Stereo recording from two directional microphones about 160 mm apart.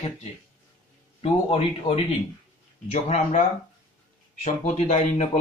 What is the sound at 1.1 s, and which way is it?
Speech, 35° left (ahead or behind).